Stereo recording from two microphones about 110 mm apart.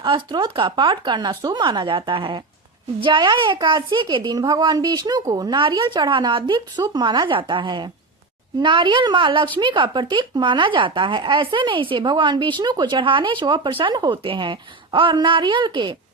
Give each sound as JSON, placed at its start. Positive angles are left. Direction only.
{"t": 0.0, "sound": "a woman's voice", "side_deg": -45}